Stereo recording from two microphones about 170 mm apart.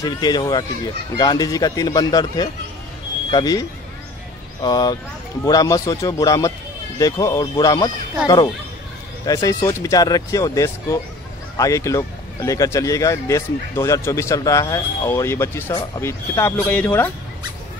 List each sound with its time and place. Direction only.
0.0 s speech: 25° left (ahead or behind)
9.2 s speech: 20° left (ahead or behind)